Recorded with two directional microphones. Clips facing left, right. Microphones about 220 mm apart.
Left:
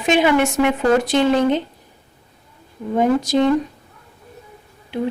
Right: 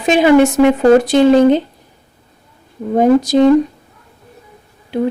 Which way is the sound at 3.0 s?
40° right (ahead or behind).